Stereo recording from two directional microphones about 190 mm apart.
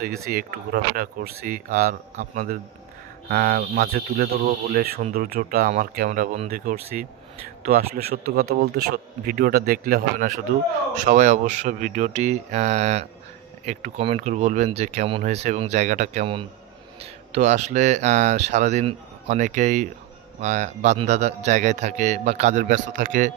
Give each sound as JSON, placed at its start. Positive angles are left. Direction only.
{"t": 0.3, "sound": "a man's voice", "side_deg": -50}
{"t": 3.5, "sound": "a man's voice", "side_deg": -55}